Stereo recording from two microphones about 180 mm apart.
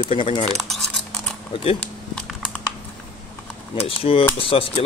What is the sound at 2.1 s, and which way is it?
Typing, centre (ahead or behind).